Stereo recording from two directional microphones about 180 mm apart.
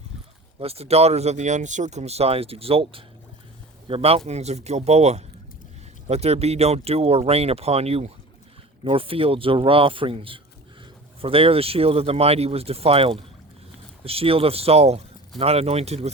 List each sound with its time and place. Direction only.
0.6 s speech: 35° right (ahead or behind)